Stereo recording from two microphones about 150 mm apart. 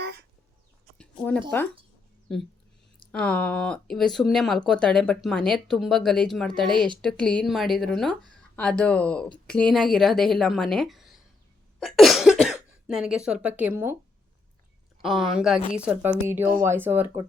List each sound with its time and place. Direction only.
0.9 s a sound: 10° left (ahead or behind)
1.5 s speech: 15° left (ahead or behind)
3.1 s speech: 5° left (ahead or behind)
6.7 s speech: 30° right (ahead or behind)
7.0 s speech: 5° left (ahead or behind); by 13.9 s 15° right (ahead or behind)
15.0 s a woman's voice: 5° right (ahead or behind)